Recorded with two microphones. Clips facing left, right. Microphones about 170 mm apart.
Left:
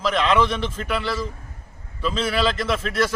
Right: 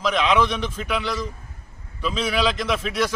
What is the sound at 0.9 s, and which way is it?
Speech, 5° left (ahead or behind).